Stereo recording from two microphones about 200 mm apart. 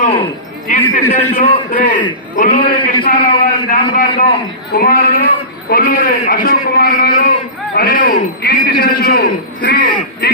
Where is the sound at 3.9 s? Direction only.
40° left (ahead or behind).